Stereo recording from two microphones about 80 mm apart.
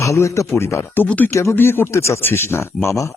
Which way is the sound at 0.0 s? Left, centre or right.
Left.